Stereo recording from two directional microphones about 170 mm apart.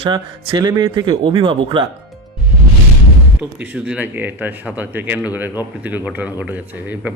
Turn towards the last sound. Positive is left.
turn(degrees=-10)  # may be behind; listen again after turning